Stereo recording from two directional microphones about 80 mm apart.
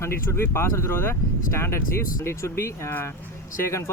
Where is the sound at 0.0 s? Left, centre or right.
Left.